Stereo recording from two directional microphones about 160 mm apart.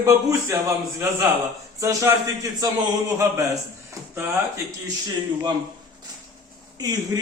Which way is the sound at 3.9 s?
20° right (ahead or behind).